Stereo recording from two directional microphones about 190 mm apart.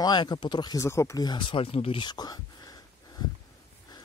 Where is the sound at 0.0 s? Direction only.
25° left (ahead or behind).